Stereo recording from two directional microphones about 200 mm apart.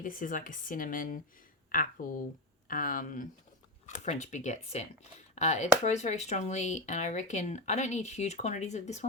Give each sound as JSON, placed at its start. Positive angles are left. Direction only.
{"t": 0.0, "sound": "speech", "side_deg": 45}